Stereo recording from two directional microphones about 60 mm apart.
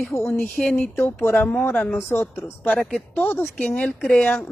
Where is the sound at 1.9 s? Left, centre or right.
Left.